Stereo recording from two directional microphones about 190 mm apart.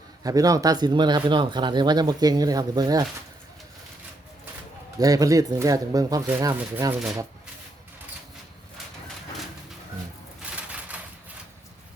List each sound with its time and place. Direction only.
0.2 s speech: 20° right (ahead or behind)
4.9 s speech: 20° right (ahead or behind)
10.4 s a sound: 5° right (ahead or behind)